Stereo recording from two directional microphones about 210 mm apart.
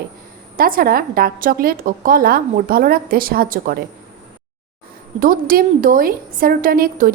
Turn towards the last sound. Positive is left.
turn(degrees=-45)  # may be behind; listen again after turning